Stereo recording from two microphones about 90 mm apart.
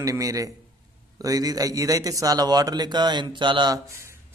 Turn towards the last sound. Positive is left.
turn(degrees=-60)  # may be behind; listen again after turning